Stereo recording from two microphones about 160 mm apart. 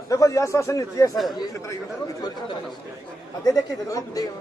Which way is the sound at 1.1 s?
Centre (ahead or behind).